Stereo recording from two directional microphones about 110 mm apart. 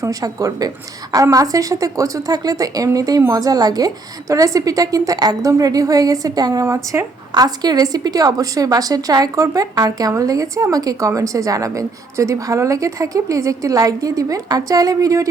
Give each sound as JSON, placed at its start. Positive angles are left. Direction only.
{"t": 0.0, "sound": "a woman's voice", "side_deg": -30}
{"t": 7.3, "sound": "a woman's voice", "side_deg": -40}